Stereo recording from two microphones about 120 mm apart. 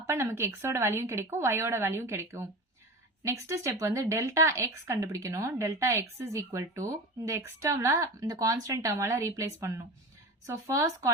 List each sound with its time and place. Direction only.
0.0 s speech: 25° right (ahead or behind)